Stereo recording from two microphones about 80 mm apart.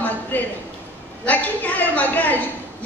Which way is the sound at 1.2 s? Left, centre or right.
Centre.